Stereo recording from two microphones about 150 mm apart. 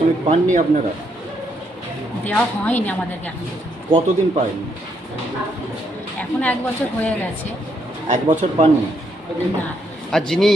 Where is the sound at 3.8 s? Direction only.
35° right (ahead or behind).